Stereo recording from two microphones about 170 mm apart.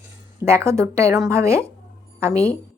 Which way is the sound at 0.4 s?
15° right (ahead or behind).